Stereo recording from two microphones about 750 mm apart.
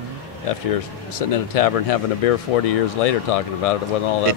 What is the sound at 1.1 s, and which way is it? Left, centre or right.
Speech, left.